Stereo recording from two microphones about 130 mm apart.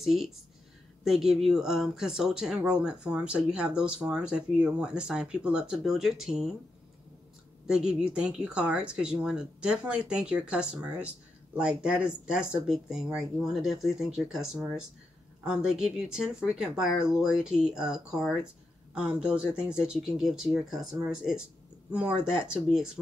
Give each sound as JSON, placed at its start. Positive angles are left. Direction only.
{"t": 0.0, "sound": "speech", "side_deg": 0}
{"t": 7.6, "sound": "speech", "side_deg": -5}